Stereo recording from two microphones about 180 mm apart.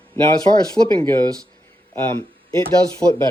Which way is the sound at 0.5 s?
40° right (ahead or behind).